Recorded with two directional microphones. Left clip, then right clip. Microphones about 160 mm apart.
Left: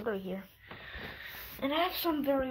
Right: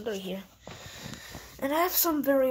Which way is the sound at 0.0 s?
20° right (ahead or behind).